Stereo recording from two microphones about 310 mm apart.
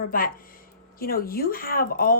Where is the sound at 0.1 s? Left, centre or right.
Left.